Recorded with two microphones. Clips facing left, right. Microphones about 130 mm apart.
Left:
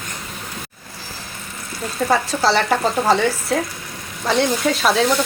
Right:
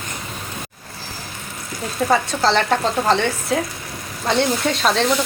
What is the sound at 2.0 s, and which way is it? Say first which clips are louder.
Frying: even; centre (ahead or behind).